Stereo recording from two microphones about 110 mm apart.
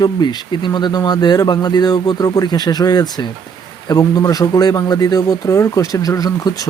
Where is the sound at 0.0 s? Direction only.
40° left (ahead or behind).